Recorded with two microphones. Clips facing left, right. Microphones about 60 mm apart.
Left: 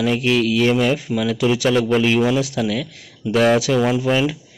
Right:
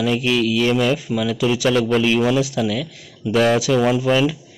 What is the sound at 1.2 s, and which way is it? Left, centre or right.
Speech, left.